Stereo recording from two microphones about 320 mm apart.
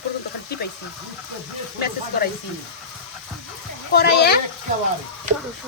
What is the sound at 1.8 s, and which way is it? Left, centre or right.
Speech, left.